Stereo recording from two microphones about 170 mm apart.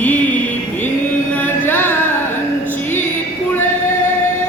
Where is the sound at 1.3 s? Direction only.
10° left (ahead or behind).